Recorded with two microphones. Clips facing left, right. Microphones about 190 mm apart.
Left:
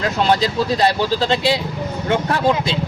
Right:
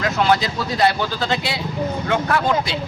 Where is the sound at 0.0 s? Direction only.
30° left (ahead or behind).